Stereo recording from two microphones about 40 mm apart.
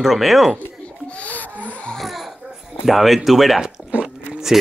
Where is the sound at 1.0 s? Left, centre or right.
Left.